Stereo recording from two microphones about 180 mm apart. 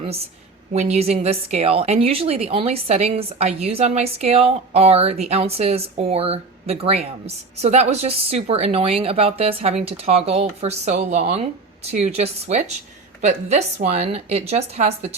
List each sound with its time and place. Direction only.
0.0 s a woman's voice: 35° right (ahead or behind)